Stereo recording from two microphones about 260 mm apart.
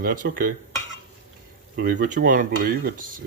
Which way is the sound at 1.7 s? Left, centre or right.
Right.